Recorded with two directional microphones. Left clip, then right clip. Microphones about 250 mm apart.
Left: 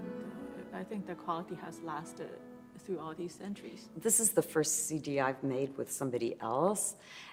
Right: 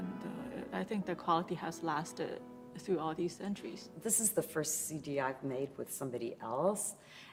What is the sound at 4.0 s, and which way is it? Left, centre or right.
A woman's voice, left.